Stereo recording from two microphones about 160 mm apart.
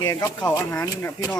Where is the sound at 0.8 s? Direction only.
20° left (ahead or behind).